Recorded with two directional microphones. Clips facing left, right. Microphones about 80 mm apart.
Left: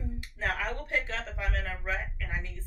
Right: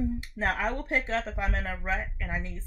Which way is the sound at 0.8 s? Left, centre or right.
Right.